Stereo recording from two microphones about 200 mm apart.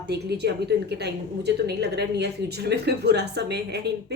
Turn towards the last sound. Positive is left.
turn(degrees=-55)  # may be behind; listen again after turning